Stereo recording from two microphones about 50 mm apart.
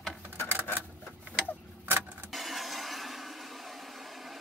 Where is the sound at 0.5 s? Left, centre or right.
Right.